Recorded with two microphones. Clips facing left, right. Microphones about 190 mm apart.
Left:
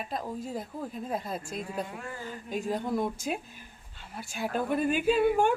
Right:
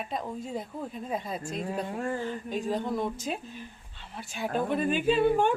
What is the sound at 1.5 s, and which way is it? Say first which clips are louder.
Speech: right 3 dB; 40° right (ahead or behind).